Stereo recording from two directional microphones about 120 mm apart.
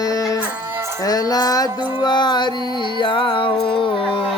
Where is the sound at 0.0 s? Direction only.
30° left (ahead or behind); by 4.2 s 45° left (ahead or behind).